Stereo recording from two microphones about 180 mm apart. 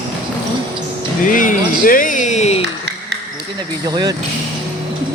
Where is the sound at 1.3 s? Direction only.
45° left (ahead or behind).